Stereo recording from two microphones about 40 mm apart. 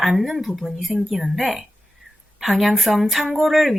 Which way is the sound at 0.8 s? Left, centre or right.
Centre.